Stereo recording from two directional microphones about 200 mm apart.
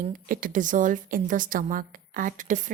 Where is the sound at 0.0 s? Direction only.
45° right (ahead or behind).